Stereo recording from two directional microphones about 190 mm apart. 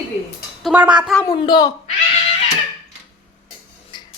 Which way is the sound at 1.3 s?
25° left (ahead or behind).